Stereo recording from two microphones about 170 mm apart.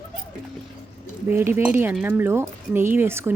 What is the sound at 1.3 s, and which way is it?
Speech, 15° right (ahead or behind).